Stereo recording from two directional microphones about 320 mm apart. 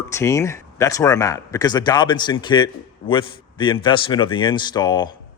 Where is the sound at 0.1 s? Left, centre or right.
Centre.